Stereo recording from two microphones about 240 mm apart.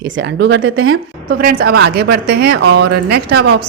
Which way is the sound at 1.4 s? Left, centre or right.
Right.